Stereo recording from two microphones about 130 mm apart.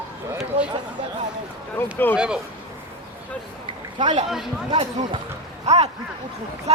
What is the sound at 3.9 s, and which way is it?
Speech, 40° right (ahead or behind).